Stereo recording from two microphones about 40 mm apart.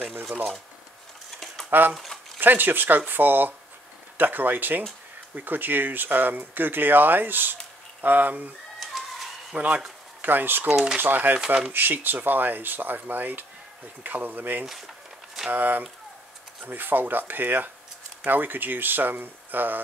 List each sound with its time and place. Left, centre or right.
1.7 s speech: right
8.7 s bird: centre
9.5 s speech: right
10.2 s speech: right